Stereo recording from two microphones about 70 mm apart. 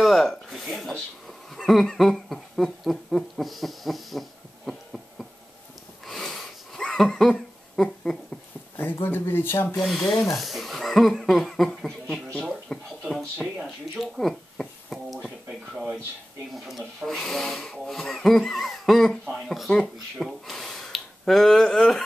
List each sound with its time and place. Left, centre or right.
0.0 s speech: centre
1.6 s a sound: centre
6.0 s sniff: centre
6.9 s laughter: centre
8.9 s speech: left
9.8 s speech: centre
13.4 s speech: centre
14.0 s speech: centre